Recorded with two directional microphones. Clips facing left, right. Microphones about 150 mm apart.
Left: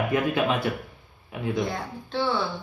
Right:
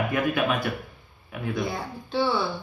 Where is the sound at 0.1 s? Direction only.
25° left (ahead or behind).